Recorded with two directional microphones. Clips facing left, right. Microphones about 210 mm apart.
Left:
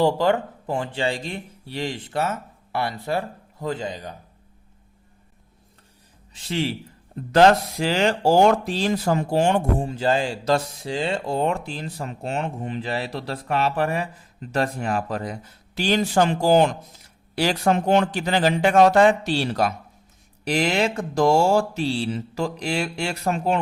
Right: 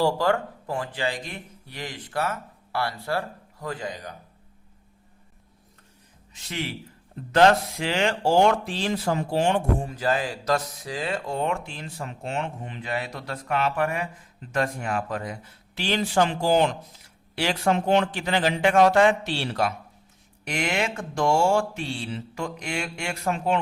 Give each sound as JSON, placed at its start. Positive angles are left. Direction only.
{"t": 0.0, "sound": "speech", "side_deg": 20}
{"t": 6.3, "sound": "speech", "side_deg": 30}
{"t": 9.8, "sound": "speech", "side_deg": 30}